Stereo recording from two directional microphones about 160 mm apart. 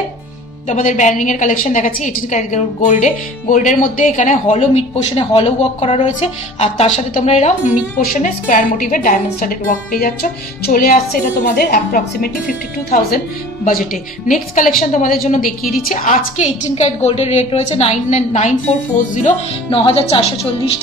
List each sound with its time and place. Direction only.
0.7 s a woman's voice: 50° left (ahead or behind)
8.0 s speech: 60° left (ahead or behind)
13.7 s speech: 60° left (ahead or behind)
14.8 s speech: 65° left (ahead or behind)
15.2 s a woman's voice: 50° left (ahead or behind)
19.7 s speech: 35° left (ahead or behind)